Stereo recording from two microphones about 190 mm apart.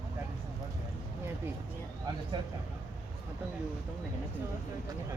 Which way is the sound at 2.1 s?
20° right (ahead or behind).